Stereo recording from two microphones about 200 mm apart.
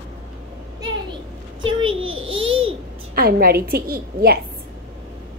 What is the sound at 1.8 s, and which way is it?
Speech, 85° right.